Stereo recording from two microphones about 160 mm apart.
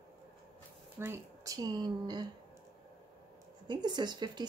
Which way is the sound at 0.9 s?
15° right (ahead or behind).